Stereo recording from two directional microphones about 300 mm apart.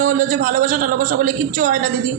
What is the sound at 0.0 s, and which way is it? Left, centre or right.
A woman's voice, right.